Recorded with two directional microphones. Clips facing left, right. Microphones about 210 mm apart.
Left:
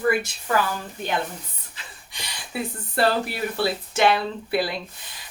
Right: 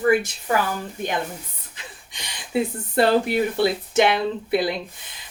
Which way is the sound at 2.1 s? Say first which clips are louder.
Right 8 dB; 20° right (ahead or behind).